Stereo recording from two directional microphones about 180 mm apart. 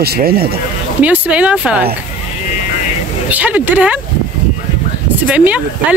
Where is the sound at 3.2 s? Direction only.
10° right (ahead or behind).